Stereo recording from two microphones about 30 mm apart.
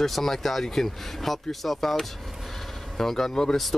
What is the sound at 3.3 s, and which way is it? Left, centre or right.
Speech, left.